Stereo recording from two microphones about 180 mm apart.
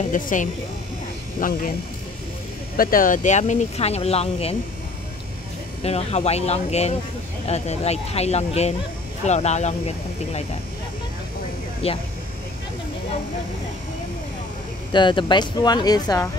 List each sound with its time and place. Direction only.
0.1 s speech: 45° left (ahead or behind)
2.8 s speech: 50° left (ahead or behind); by 4.6 s 35° left (ahead or behind)
5.9 s speech: 35° left (ahead or behind)
11.8 s speech: 35° left (ahead or behind)
14.9 s speech: 25° left (ahead or behind)